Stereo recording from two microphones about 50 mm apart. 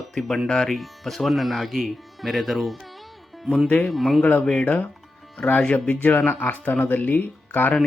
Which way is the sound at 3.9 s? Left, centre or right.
Centre.